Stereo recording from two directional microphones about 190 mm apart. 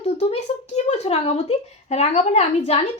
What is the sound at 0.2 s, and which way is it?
Speech, 30° left (ahead or behind).